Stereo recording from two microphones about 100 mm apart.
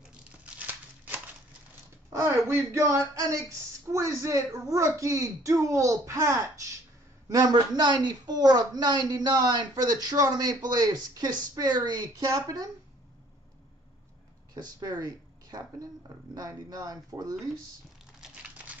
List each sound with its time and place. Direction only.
0.6 s a sound: 20° right (ahead or behind)
2.1 s speech: 25° right (ahead or behind)
14.5 s speech: 40° right (ahead or behind)